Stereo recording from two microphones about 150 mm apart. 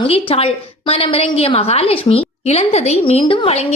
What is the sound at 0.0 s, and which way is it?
A woman's voice, 35° left (ahead or behind).